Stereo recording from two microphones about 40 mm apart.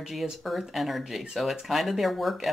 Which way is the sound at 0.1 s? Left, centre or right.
Centre.